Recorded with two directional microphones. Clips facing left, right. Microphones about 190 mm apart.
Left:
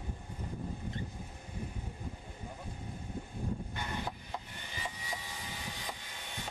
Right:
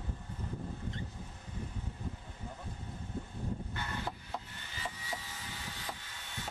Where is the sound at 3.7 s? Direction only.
15° left (ahead or behind).